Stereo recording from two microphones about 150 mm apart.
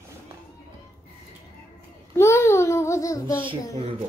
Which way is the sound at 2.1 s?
20° left (ahead or behind).